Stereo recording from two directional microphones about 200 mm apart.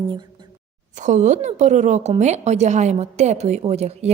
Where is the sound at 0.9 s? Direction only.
35° right (ahead or behind).